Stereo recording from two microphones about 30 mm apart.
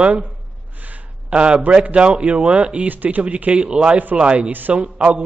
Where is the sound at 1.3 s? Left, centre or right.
Right.